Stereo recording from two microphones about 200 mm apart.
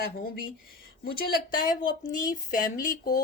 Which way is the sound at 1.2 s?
40° left (ahead or behind).